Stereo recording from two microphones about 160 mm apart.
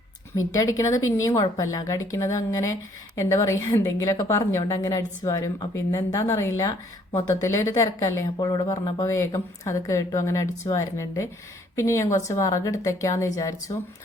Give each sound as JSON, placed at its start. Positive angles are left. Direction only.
{"t": 0.5, "sound": "a woman's voice", "side_deg": 20}